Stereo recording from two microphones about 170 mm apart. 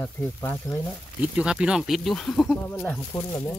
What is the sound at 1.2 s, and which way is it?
Speech, 5° right (ahead or behind).